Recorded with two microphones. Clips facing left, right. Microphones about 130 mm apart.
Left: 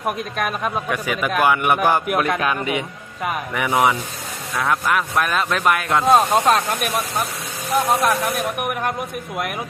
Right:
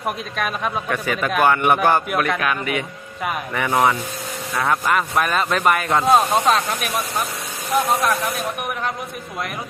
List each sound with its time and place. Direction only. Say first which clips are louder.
0.0 s a man's voice: left 1 dB; 5° left (ahead or behind)
2.1 s speech: left 1 dB; 20° left (ahead or behind)
3.2 s a man's voice: even; 5° left (ahead or behind)
6.3 s a man's voice: left 1 dB; 10° left (ahead or behind)